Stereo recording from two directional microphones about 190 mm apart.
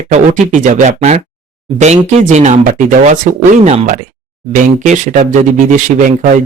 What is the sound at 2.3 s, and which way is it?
Speech, 40° right (ahead or behind).